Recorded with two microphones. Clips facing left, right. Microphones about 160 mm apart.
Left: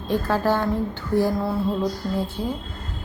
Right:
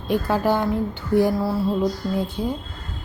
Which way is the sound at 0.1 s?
15° right (ahead or behind).